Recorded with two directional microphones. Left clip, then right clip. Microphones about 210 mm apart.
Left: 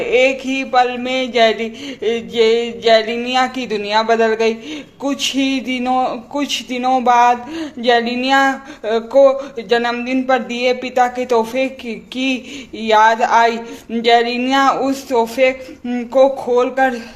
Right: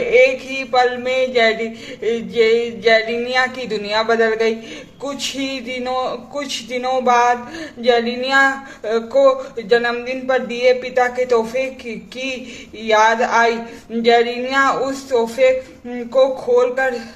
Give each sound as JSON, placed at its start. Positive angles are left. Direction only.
{"t": 0.1, "sound": "speech", "side_deg": 30}